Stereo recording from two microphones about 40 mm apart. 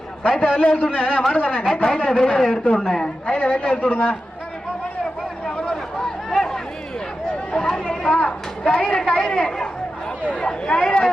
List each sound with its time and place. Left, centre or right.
0.2 s speech: left
0.8 s a man's voice: left
3.3 s a man's voice: left
5.5 s a sound: left
5.7 s a sound: centre
7.5 s chatter: centre
8.0 s speech: left